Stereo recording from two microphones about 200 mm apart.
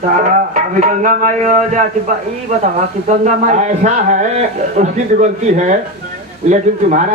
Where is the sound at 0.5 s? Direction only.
40° right (ahead or behind).